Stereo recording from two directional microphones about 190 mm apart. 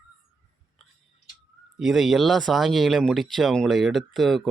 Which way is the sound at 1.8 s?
Centre (ahead or behind).